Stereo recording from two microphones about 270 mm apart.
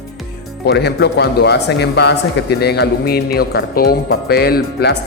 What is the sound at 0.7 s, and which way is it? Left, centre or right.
Speech, left.